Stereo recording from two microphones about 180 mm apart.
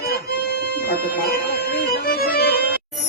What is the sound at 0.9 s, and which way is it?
Music, 55° left (ahead or behind).